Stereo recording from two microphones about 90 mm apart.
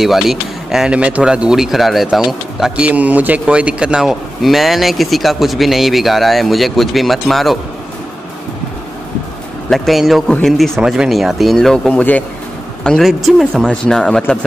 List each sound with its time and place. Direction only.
0.0 s speech: 5° right (ahead or behind)
2.7 s speech: 15° right (ahead or behind); by 7.5 s centre (ahead or behind)
9.7 s speech: centre (ahead or behind)
11.9 s speech: 15° left (ahead or behind)
12.8 s speech: 5° left (ahead or behind)